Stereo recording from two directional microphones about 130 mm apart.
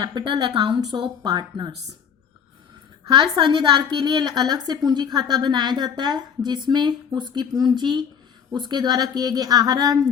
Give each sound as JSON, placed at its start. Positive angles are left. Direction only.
{"t": 0.0, "sound": "a woman's voice", "side_deg": -35}
{"t": 3.3, "sound": "a woman's voice", "side_deg": -35}